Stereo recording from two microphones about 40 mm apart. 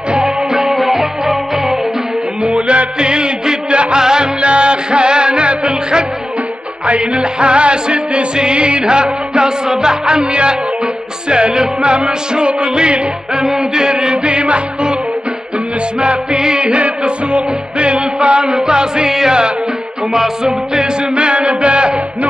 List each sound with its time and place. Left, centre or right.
0.1 s music: centre
2.4 s music: right
13.4 s music: centre
16.0 s music: right
21.1 s music: right